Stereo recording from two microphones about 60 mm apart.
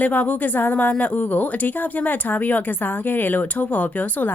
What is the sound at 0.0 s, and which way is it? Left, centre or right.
Speech, left.